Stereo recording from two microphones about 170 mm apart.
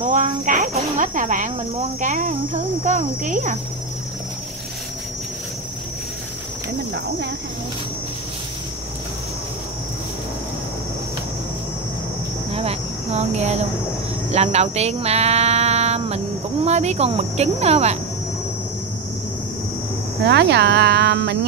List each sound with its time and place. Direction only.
0.0 s speech: 45° right (ahead or behind)
6.9 s speech: 75° right (ahead or behind)
12.5 s speech: 40° right (ahead or behind)
20.2 s speech: 80° right